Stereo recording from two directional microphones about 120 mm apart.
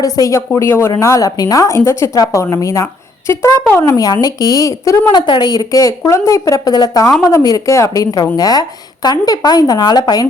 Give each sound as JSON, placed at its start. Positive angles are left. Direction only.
{"t": 0.0, "sound": "a woman's voice", "side_deg": 25}
{"t": 5.2, "sound": "a woman's voice", "side_deg": 35}